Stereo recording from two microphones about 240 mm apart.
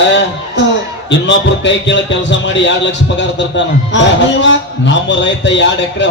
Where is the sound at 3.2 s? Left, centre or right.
Left.